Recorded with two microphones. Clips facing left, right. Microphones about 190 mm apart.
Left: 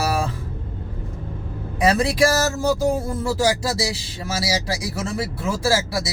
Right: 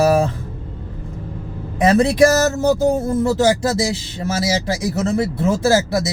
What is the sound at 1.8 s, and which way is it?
A woman's voice, 20° right (ahead or behind).